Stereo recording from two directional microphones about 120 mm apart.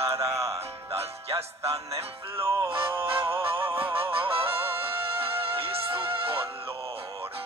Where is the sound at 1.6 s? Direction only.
55° right (ahead or behind).